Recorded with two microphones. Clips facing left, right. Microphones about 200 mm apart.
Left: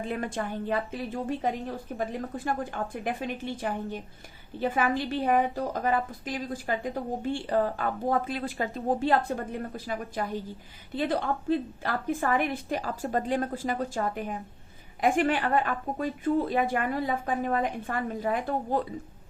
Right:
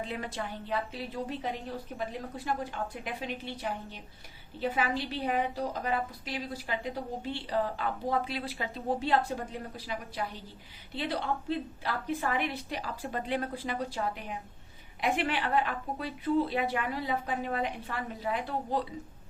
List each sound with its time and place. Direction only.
0.0 s a woman's voice: 50° left (ahead or behind)